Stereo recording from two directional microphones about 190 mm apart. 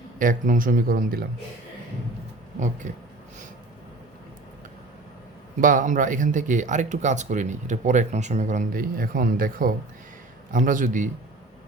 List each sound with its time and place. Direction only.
0.2 s speech: 45° right (ahead or behind)
2.6 s speech: 40° right (ahead or behind)
5.5 s speech: 45° right (ahead or behind)